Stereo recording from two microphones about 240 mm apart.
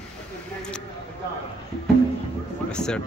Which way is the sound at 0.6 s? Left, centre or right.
Centre.